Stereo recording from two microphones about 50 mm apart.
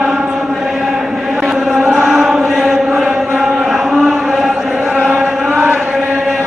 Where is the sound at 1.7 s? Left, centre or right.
Centre.